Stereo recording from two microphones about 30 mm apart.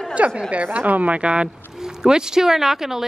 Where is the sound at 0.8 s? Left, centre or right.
Right.